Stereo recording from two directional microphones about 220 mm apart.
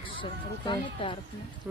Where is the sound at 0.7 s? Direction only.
20° left (ahead or behind).